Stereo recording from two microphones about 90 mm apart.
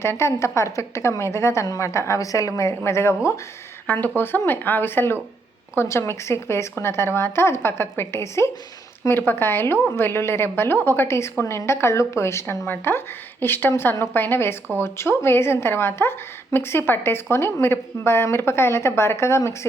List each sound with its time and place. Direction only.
0.0 s a woman's voice: 30° left (ahead or behind)
3.8 s a woman's voice: 20° left (ahead or behind)